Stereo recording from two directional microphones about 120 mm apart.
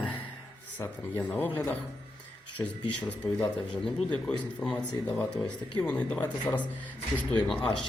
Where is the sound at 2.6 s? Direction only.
10° left (ahead or behind).